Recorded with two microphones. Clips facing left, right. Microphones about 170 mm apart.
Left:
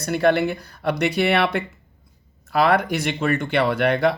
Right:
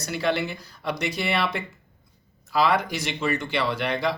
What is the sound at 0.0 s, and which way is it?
Speech, 55° left (ahead or behind).